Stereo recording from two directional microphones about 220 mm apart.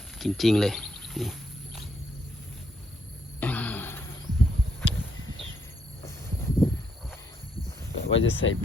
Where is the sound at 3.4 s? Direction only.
5° left (ahead or behind).